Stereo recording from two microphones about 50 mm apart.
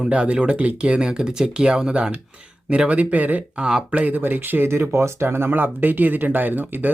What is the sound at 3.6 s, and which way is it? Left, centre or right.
Speech, centre.